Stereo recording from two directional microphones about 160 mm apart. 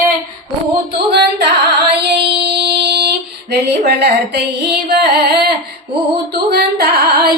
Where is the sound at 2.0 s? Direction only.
90° right.